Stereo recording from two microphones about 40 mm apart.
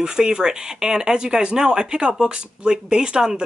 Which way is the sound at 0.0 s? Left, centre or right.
Centre.